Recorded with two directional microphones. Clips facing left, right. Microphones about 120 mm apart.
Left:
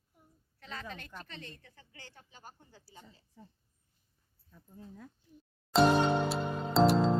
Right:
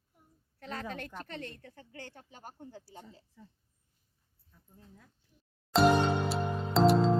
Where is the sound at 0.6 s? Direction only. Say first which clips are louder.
Right 5 dB; 55° right (ahead or behind).